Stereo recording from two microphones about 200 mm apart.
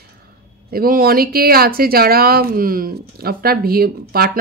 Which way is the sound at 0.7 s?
45° right (ahead or behind).